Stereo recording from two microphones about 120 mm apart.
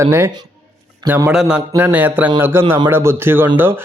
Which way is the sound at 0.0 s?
25° right (ahead or behind).